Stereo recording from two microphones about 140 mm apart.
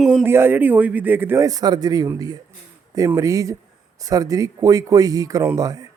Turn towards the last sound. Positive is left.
turn(degrees=-25)  # may be behind; listen again after turning